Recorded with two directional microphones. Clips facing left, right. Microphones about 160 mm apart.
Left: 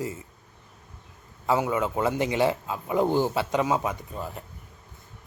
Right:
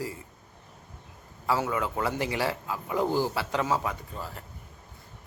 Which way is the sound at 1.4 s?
20° left (ahead or behind).